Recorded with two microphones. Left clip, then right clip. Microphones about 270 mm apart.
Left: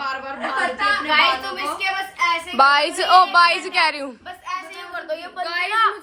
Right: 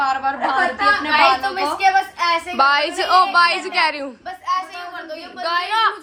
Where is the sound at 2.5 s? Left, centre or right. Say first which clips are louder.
Left 3 dB; centre.